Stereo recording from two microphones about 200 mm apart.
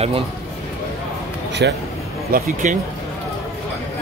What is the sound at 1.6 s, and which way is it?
Speech, 60° right (ahead or behind).